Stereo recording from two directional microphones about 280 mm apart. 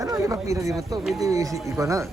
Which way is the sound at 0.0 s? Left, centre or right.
Centre.